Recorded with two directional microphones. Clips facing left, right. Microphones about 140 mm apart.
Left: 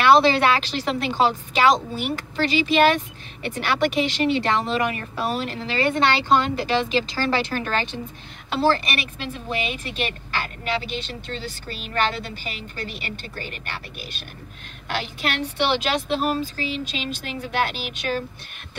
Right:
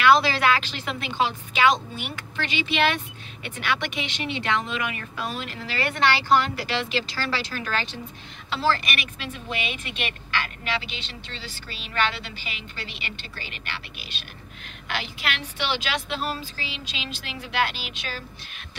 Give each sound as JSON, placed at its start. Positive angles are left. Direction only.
{"t": 0.0, "sound": "a woman's voice", "side_deg": 30}
{"t": 5.7, "sound": "speech", "side_deg": 25}
{"t": 7.2, "sound": "speech", "side_deg": 50}
{"t": 8.5, "sound": "speech", "side_deg": 30}
{"t": 15.2, "sound": "speech", "side_deg": 45}